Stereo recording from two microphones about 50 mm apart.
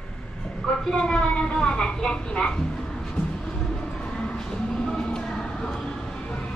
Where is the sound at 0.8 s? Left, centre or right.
Centre.